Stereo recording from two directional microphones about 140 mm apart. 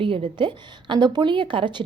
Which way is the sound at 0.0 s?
40° right (ahead or behind).